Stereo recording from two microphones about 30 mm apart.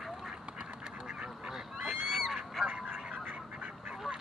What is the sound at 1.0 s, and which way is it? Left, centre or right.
Duck, right.